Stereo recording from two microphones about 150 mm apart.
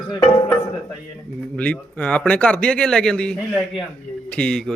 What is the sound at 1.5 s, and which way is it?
A man's voice, 10° left (ahead or behind).